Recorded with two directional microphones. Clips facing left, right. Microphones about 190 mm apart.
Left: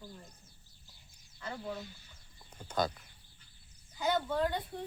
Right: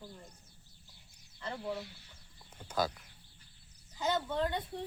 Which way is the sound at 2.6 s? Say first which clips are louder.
Left 1 dB; 5° right (ahead or behind).